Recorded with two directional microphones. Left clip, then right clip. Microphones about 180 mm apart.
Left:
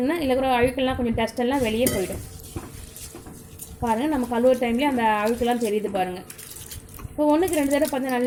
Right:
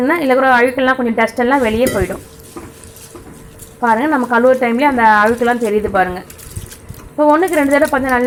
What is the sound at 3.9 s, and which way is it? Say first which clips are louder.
Speech: right 11 dB; centre (ahead or behind).